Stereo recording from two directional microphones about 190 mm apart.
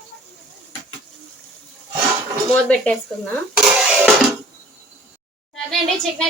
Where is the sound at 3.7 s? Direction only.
5° right (ahead or behind).